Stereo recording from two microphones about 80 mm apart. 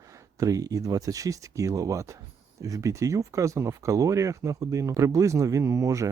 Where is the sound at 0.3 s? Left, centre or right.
Right.